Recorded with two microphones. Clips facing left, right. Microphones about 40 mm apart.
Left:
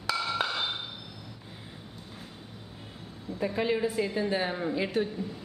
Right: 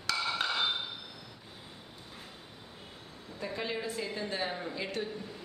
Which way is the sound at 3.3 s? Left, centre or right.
Centre.